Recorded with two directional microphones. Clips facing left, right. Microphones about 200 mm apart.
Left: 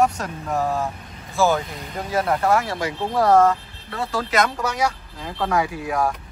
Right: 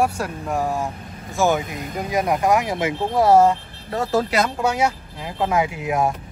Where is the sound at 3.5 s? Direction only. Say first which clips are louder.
Right 2 dB; 40° right (ahead or behind).